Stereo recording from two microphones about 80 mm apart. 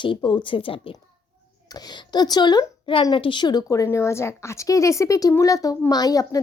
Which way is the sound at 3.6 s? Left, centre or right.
Left.